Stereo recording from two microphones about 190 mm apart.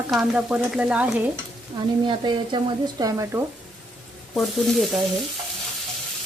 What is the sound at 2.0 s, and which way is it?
Speech, 25° right (ahead or behind).